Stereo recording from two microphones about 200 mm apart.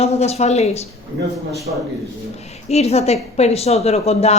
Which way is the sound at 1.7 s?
45° right (ahead or behind).